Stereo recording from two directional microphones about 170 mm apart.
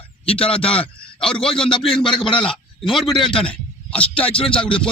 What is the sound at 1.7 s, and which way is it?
Speech, 30° left (ahead or behind).